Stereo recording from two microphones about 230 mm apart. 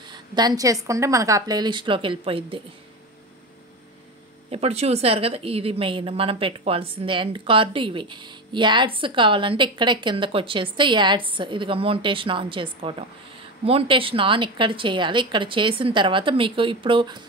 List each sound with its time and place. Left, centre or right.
0.1 s a woman's voice: centre
4.5 s speech: right